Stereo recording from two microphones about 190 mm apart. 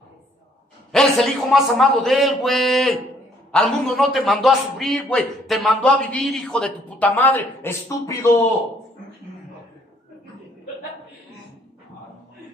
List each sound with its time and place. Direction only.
0.9 s a man's voice: centre (ahead or behind)